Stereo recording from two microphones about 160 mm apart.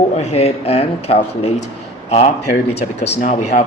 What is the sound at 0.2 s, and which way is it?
A man's voice, 40° left (ahead or behind).